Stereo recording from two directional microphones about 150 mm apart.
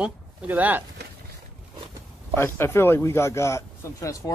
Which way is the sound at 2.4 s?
15° left (ahead or behind).